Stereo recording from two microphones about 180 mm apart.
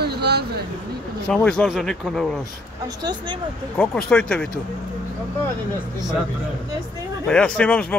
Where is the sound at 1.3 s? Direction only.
5° left (ahead or behind).